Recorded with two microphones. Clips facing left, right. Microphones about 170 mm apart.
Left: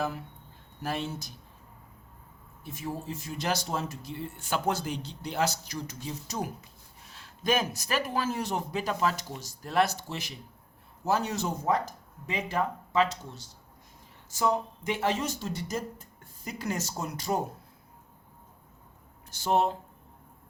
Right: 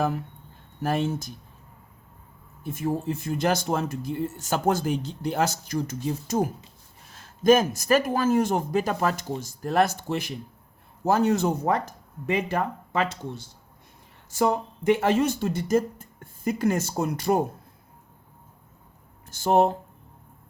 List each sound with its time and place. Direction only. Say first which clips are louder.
0.8 s speech: right 8 dB; 50° right (ahead or behind)
2.6 s speech: right 9 dB; 50° right (ahead or behind)
19.3 s speech: right 6 dB; 50° right (ahead or behind)